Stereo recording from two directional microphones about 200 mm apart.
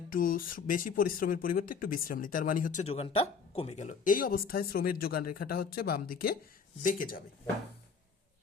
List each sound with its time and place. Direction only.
0.1 s speech: 45° left (ahead or behind)